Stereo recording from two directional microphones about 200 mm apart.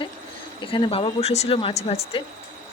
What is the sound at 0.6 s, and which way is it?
Speech, 25° left (ahead or behind).